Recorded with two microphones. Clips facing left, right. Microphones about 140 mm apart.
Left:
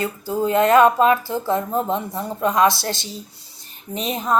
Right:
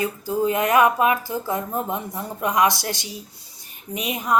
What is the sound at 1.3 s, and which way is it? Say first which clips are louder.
Speech: left 4 dB; 25° left (ahead or behind).